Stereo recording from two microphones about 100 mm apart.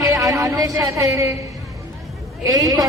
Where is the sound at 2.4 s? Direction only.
35° right (ahead or behind).